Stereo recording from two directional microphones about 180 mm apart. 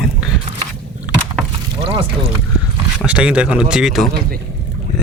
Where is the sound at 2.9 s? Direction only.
5° right (ahead or behind).